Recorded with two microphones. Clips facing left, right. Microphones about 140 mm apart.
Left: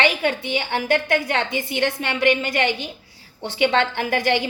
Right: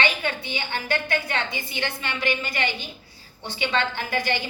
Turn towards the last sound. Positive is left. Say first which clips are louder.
# left 6 dB
turn(degrees=70)  # may be behind; listen again after turning